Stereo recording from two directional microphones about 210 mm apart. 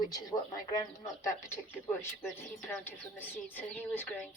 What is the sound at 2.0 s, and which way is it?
Speech, 10° left (ahead or behind).